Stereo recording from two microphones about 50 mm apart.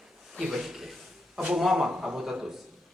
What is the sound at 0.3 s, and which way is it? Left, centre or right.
A man's voice, centre.